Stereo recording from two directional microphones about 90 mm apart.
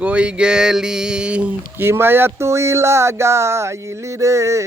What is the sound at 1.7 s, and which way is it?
Speech, 25° right (ahead or behind).